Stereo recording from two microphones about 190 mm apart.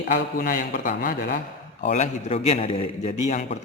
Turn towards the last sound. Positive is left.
turn(degrees=35)  # may be behind; listen again after turning